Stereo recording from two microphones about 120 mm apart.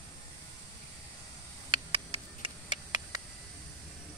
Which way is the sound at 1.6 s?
50° right (ahead or behind).